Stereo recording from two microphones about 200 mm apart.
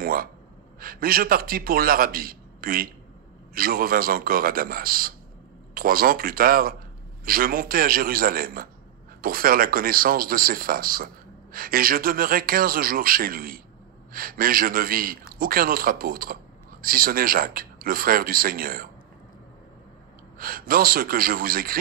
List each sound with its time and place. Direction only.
0.0 s gasp: 45° right (ahead or behind)
0.7 s a man's voice: 45° right (ahead or behind)
20.3 s a man's voice: 45° right (ahead or behind)